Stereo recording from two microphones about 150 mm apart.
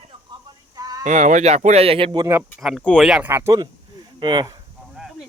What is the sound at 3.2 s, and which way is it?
Speech, 15° right (ahead or behind).